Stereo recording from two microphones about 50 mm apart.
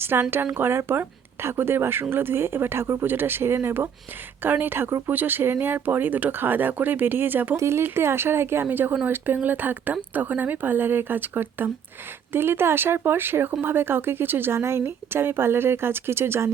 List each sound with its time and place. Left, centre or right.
0.0 s speech: right
4.4 s speech: right
7.5 s speech: right
7.9 s speech: right
14.5 s speech: right